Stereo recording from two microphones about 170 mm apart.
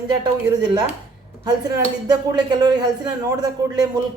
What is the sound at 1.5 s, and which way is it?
Speech, 20° right (ahead or behind).